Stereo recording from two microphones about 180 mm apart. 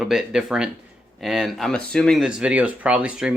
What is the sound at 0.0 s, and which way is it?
Speech, centre (ahead or behind).